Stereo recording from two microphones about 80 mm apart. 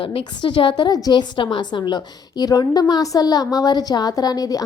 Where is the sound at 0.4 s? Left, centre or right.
Left.